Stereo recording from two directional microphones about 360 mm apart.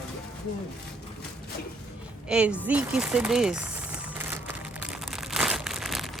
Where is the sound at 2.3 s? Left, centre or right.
Centre.